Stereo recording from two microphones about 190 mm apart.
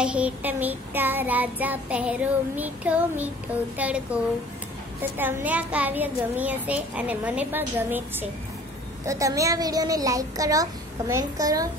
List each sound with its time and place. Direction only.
0.0 s child singing: 5° right (ahead or behind)